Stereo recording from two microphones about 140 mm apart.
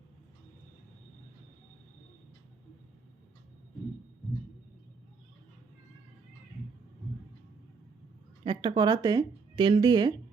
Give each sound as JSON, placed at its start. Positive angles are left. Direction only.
{"t": 8.4, "sound": "speech", "side_deg": -35}